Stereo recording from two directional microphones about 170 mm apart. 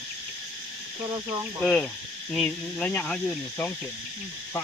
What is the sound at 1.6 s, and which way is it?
Speech, 5° left (ahead or behind).